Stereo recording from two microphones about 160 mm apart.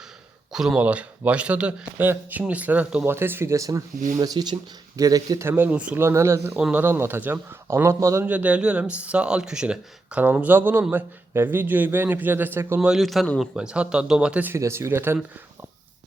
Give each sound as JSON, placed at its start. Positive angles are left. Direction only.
{"t": 0.5, "sound": "speech", "side_deg": -5}
{"t": 12.9, "sound": "speech", "side_deg": 0}